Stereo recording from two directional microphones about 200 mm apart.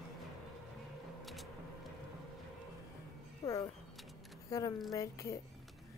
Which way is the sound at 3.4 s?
15° left (ahead or behind).